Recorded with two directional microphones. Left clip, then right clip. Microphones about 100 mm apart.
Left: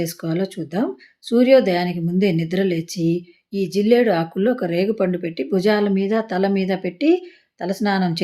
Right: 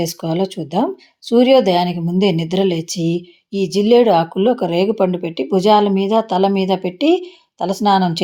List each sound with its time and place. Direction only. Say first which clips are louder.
0.0 s a woman's voice: right 4 dB; 15° right (ahead or behind)